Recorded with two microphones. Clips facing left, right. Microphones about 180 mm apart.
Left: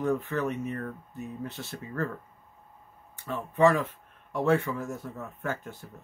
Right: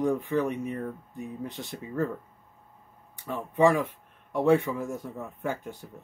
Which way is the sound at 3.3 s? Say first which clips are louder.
Even; 15° right (ahead or behind).